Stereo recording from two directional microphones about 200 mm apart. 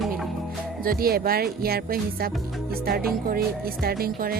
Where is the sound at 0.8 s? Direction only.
45° right (ahead or behind).